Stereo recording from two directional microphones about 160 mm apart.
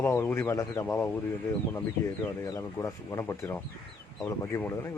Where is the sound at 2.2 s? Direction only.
20° left (ahead or behind).